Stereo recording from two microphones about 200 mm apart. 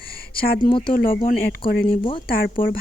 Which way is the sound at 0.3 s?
50° left (ahead or behind).